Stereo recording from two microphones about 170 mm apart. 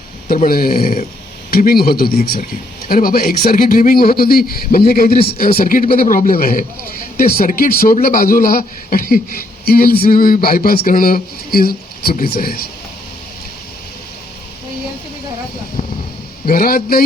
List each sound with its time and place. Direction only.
0.4 s a man's voice: 60° left (ahead or behind)
16.5 s a man's voice: 60° left (ahead or behind)